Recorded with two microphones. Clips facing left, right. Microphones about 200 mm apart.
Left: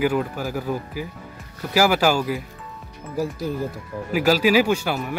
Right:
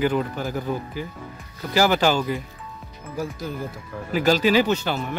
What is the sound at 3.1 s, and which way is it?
Speech, 35° left (ahead or behind).